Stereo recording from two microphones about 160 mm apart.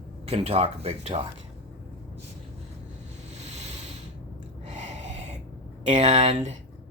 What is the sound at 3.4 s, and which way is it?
Ocean, 45° right (ahead or behind).